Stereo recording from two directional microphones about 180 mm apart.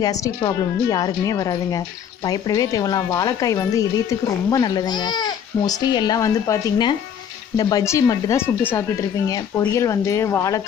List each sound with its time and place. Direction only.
0.0 s speech: 20° left (ahead or behind)